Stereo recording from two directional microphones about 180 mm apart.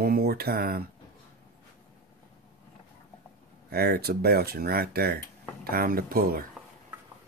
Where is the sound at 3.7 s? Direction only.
60° right (ahead or behind).